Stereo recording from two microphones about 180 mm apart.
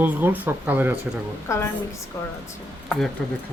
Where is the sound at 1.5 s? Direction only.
15° left (ahead or behind).